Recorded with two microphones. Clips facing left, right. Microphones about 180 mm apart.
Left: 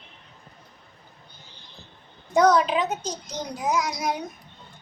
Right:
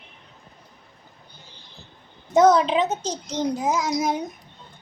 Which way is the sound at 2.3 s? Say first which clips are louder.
Right 3 dB; 25° right (ahead or behind).